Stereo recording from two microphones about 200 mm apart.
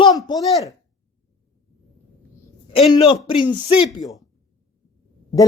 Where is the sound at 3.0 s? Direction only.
20° left (ahead or behind).